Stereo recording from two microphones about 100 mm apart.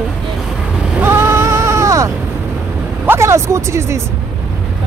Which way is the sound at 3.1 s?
25° right (ahead or behind).